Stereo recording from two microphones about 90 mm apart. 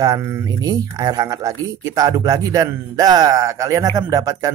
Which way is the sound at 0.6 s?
45° right (ahead or behind).